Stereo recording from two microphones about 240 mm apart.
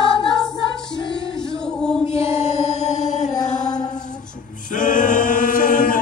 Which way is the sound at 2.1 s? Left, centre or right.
Left.